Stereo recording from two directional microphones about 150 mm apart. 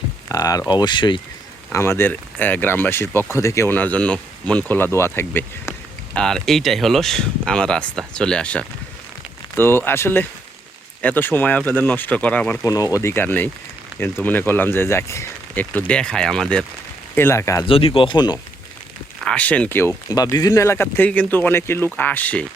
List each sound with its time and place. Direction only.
0.3 s speech: 25° left (ahead or behind)
1.7 s speech: 15° left (ahead or behind)
6.1 s speech: 5° left (ahead or behind)
12.6 s speech: 25° left (ahead or behind); by 16.6 s 5° left (ahead or behind)
17.2 s speech: 15° left (ahead or behind)
17.7 s speech: 40° left (ahead or behind)
19.2 s speech: 10° left (ahead or behind)